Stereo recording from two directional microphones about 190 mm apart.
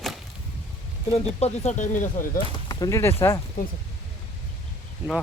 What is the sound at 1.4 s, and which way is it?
Speech, 40° left (ahead or behind).